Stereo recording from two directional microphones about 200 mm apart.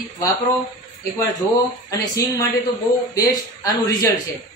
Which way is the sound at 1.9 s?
20° left (ahead or behind).